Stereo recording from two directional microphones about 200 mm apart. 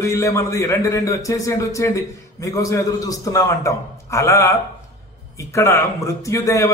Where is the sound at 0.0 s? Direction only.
15° left (ahead or behind).